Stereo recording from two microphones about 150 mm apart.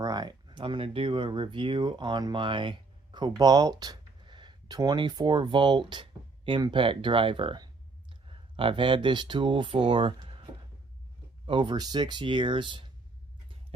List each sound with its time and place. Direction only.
0.0 s speech: 25° right (ahead or behind)